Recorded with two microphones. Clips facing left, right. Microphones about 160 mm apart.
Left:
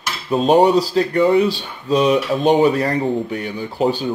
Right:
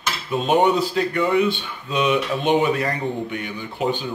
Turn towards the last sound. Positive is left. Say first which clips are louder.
# left 5 dB
turn(degrees=35)  # may be behind; listen again after turning